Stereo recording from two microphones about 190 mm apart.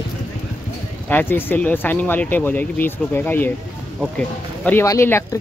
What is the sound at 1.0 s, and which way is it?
Speech, 10° left (ahead or behind).